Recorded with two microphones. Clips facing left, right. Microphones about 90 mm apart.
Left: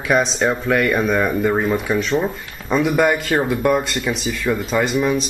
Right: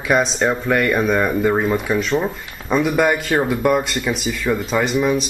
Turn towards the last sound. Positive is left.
turn(degrees=0)  # may be behind; listen again after turning